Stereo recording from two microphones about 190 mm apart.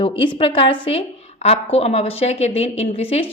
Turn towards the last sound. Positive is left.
turn(degrees=30)  # may be behind; listen again after turning